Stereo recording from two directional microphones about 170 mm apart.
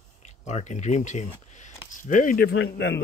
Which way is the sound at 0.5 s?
40° left (ahead or behind).